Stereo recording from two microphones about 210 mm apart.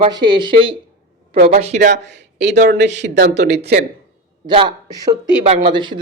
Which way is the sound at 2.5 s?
40° right (ahead or behind).